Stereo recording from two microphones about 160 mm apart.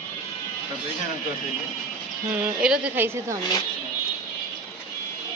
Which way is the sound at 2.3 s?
5° right (ahead or behind).